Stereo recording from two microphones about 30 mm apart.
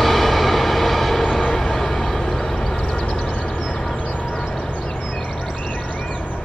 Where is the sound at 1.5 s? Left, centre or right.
Centre.